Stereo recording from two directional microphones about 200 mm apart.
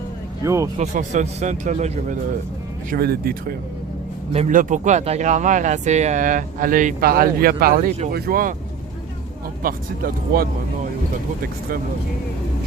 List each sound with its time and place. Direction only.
0.4 s speech: 15° right (ahead or behind)
0.8 s speech: 35° right (ahead or behind)
2.9 s speech: 50° right (ahead or behind)
4.3 s speech: 35° right (ahead or behind)
9.6 s speech: 45° right (ahead or behind)